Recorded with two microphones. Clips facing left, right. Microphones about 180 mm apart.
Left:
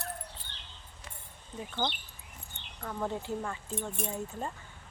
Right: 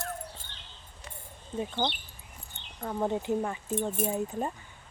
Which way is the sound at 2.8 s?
25° right (ahead or behind).